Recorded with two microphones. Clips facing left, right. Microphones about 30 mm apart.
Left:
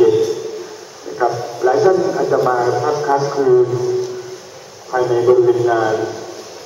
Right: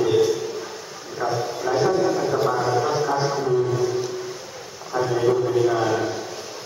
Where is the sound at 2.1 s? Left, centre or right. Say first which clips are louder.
Left 6 dB; centre.